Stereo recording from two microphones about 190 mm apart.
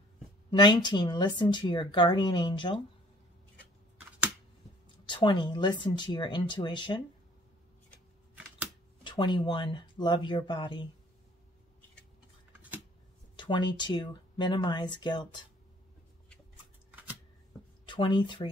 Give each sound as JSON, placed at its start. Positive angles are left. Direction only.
{"t": 0.5, "sound": "speech", "side_deg": 25}
{"t": 5.0, "sound": "speech", "side_deg": 25}
{"t": 8.4, "sound": "a sound", "side_deg": -5}
{"t": 9.0, "sound": "speech", "side_deg": 25}
{"t": 13.4, "sound": "speech", "side_deg": 25}
{"t": 17.8, "sound": "speech", "side_deg": 25}